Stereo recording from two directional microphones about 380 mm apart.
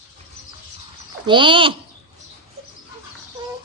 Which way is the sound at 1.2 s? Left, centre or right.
Centre.